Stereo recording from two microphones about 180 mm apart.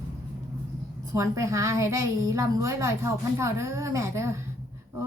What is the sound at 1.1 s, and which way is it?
A woman's voice, 20° right (ahead or behind).